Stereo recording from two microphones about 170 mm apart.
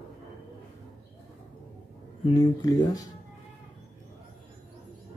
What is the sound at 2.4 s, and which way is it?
Speech, 20° left (ahead or behind).